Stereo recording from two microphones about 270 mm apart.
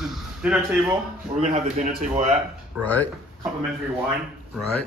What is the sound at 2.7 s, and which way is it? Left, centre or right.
Speech, centre.